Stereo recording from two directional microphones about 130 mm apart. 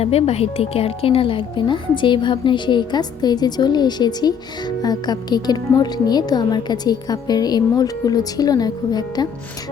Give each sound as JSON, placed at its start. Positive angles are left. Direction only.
{"t": 0.0, "sound": "speech", "side_deg": 50}